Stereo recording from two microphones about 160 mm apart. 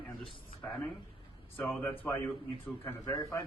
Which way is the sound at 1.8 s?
15° left (ahead or behind).